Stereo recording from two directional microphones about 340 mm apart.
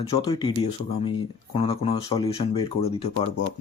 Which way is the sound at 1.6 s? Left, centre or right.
Centre.